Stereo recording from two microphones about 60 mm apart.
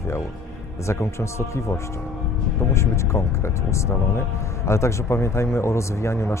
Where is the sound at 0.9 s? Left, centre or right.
Left.